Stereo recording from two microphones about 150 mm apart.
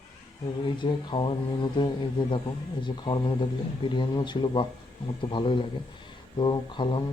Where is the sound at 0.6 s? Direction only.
30° left (ahead or behind).